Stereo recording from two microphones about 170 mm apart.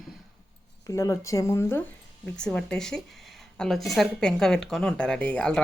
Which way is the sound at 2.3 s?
5° left (ahead or behind).